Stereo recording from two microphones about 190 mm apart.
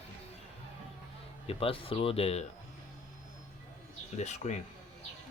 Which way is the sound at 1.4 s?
30° left (ahead or behind).